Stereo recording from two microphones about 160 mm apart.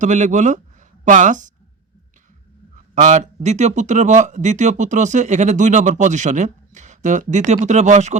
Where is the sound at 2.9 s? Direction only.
50° right (ahead or behind).